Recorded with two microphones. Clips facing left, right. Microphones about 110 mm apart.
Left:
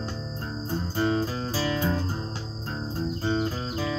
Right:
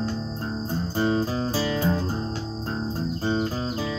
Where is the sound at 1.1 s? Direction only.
30° right (ahead or behind).